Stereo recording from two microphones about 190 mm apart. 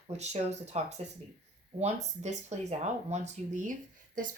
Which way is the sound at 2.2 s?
35° right (ahead or behind).